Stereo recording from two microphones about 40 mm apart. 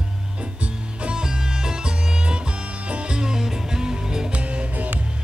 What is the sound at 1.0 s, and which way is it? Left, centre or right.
Music, centre.